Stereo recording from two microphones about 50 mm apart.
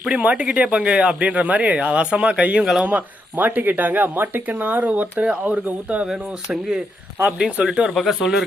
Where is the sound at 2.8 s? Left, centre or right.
Right.